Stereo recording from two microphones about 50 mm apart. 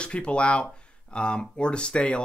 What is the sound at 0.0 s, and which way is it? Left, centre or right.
Speech, left.